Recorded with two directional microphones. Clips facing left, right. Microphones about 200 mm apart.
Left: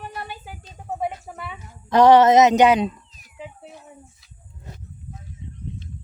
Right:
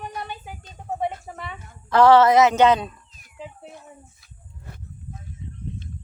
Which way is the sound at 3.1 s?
50° right (ahead or behind).